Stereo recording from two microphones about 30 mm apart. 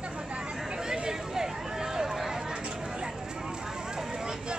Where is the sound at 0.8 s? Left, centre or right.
Right.